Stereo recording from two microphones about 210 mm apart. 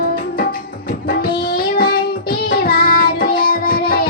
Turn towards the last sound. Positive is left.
turn(degrees=45)  # may be behind; listen again after turning